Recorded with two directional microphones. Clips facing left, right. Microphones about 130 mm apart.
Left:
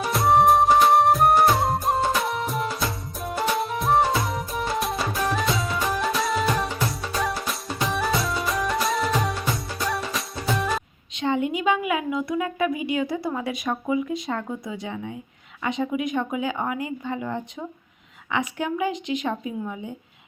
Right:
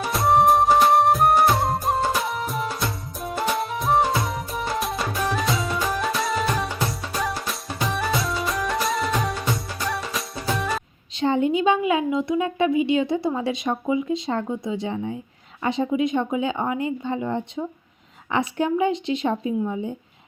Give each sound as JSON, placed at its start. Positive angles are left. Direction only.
{"t": 0.0, "sound": "music", "side_deg": 0}
{"t": 11.2, "sound": "a woman's voice", "side_deg": -30}